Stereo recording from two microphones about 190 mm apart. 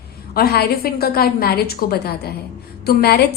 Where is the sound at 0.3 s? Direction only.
55° left (ahead or behind).